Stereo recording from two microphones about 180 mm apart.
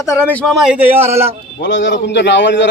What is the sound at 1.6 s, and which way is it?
A man's voice, 85° left.